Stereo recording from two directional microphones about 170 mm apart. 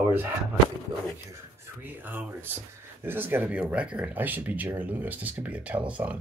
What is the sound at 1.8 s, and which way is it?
Speech, 10° right (ahead or behind).